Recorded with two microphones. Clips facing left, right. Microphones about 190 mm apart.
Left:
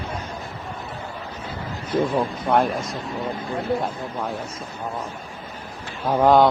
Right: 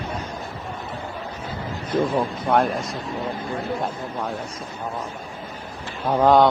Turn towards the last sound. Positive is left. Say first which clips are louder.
# even
turn(degrees=0)  # may be behind; listen again after turning